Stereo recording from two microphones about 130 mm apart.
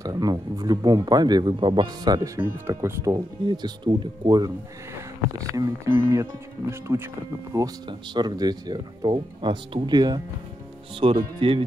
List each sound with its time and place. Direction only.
0.0 s speech: 30° right (ahead or behind)
2.3 s speech: 20° right (ahead or behind)
3.4 s speech: 35° right (ahead or behind)
5.6 s speech: 20° right (ahead or behind)
7.5 s speech: 30° right (ahead or behind)
11.0 s speech: 45° right (ahead or behind)